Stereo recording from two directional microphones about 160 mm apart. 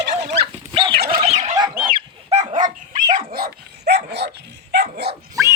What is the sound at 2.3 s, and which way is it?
Dog, 45° right (ahead or behind).